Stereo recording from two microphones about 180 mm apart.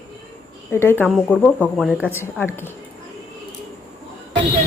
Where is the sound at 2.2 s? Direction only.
10° left (ahead or behind).